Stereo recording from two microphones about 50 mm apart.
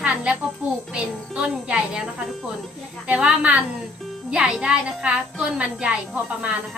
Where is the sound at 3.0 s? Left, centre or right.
Right.